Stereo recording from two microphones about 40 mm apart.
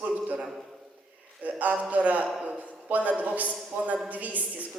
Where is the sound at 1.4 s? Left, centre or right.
Right.